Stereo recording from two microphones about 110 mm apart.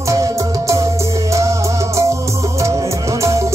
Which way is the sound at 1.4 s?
30° right (ahead or behind).